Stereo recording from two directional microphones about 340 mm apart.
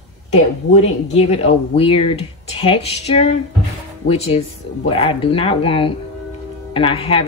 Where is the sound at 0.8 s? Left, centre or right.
Centre.